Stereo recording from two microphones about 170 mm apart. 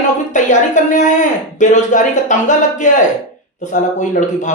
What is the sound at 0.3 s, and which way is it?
Speech, 45° left (ahead or behind).